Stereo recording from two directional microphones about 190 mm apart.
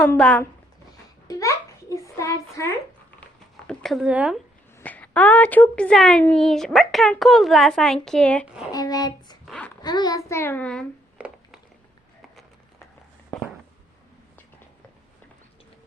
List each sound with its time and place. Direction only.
0.0 s a child's voice: 5° left (ahead or behind)
1.3 s a sound: 15° left (ahead or behind)
3.7 s a woman's voice: 5° left (ahead or behind)
4.8 s a woman's voice: 10° left (ahead or behind)
8.4 s a woman's voice: 5° right (ahead or behind)
8.7 s speech: 20° left (ahead or behind)
9.5 s a sound: 5° left (ahead or behind)
9.8 s a child's voice: 20° left (ahead or behind); by 10.8 s 5° left (ahead or behind)
11.2 s a sound: 5° right (ahead or behind)